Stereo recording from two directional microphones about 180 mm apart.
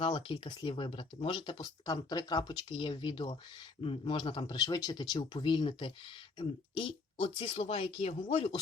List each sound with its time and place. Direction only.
0.0 s speech: 30° left (ahead or behind)